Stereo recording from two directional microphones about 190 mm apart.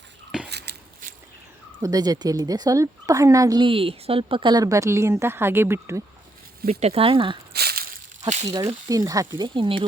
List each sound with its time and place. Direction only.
0.4 s biting: 60° right (ahead or behind)
1.8 s a woman's voice: 20° right (ahead or behind)
6.7 s a woman's voice: 35° right (ahead or behind)
7.5 s a sound: 55° right (ahead or behind)
8.4 s a woman's voice: 20° right (ahead or behind)